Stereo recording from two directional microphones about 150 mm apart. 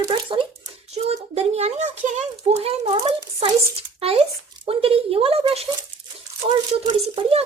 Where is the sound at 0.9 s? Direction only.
45° right (ahead or behind).